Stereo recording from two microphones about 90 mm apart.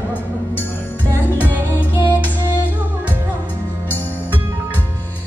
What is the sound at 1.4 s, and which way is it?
Music, 20° right (ahead or behind).